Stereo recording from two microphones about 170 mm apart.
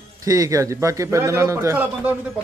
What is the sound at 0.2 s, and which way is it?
A man's voice, 20° right (ahead or behind).